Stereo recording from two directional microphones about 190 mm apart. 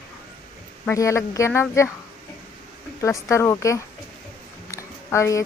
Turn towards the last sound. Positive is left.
turn(degrees=15)  # may be behind; listen again after turning